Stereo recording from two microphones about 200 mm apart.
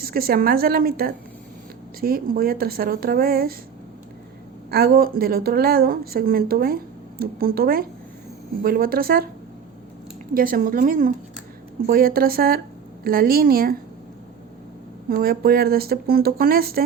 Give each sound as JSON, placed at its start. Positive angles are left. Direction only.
{"t": 0.0, "sound": "speech", "side_deg": -50}
{"t": 4.7, "sound": "speech", "side_deg": -50}
{"t": 10.3, "sound": "speech", "side_deg": -45}
{"t": 15.1, "sound": "speech", "side_deg": -50}